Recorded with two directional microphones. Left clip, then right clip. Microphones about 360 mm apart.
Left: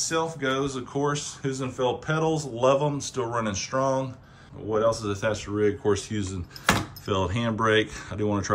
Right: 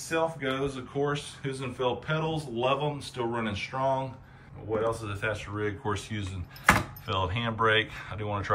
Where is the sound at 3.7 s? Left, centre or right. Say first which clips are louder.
Left 4 dB; right.